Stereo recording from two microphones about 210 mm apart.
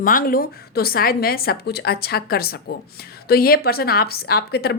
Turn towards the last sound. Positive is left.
turn(degrees=50)  # may be behind; listen again after turning